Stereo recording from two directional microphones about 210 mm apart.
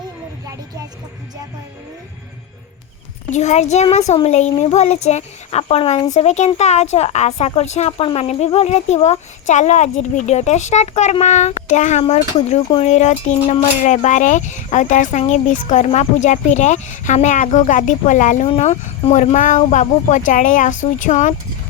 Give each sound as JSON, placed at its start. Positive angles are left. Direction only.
{"t": 3.3, "sound": "speech", "side_deg": 35}